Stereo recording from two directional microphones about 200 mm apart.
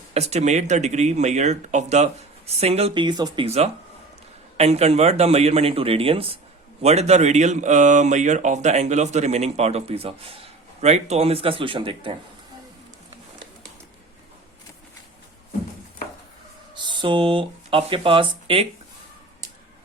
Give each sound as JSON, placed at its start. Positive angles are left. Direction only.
{"t": 0.1, "sound": "speech", "side_deg": -35}
{"t": 16.7, "sound": "speech", "side_deg": -25}